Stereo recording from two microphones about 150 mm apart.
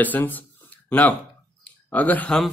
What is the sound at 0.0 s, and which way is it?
A man's voice, 10° left (ahead or behind).